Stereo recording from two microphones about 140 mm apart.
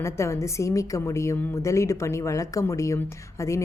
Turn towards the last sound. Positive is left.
turn(degrees=20)  # may be behind; listen again after turning